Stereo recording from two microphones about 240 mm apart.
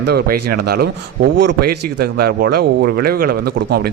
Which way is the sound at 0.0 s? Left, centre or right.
Right.